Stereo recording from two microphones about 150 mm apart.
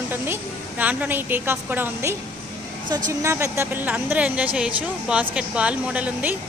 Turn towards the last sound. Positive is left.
turn(degrees=-10)  # may be behind; listen again after turning